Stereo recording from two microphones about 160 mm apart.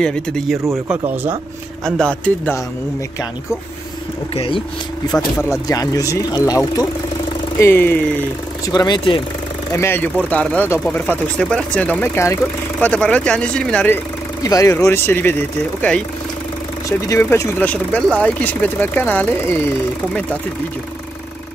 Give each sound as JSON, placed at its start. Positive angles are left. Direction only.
{"t": 0.0, "sound": "speech", "side_deg": 5}
{"t": 0.8, "sound": "speech", "side_deg": -10}
{"t": 1.9, "sound": "speech", "side_deg": 5}
{"t": 5.1, "sound": "speech", "side_deg": 20}
{"t": 8.6, "sound": "speech", "side_deg": 25}
{"t": 9.8, "sound": "speech", "side_deg": 15}
{"t": 17.1, "sound": "speech", "side_deg": 15}